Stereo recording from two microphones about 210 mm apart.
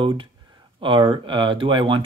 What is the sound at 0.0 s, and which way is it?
Speech, 25° right (ahead or behind).